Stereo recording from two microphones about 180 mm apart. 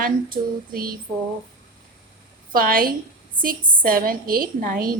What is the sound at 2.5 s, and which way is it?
A woman's voice, 50° right (ahead or behind).